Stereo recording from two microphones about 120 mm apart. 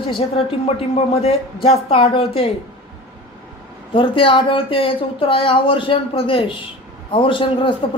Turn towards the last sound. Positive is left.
turn(degrees=45)  # may be behind; listen again after turning